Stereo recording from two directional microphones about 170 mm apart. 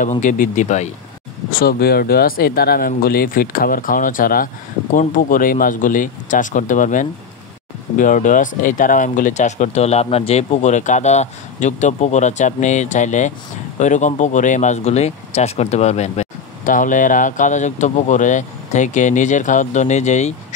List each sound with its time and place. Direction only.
0.0 s speech: 50° left (ahead or behind)
1.5 s speech: 60° left (ahead or behind); by 20.3 s 40° left (ahead or behind)